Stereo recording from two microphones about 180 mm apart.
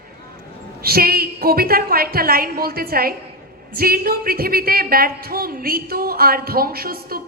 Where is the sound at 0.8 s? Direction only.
55° right (ahead or behind).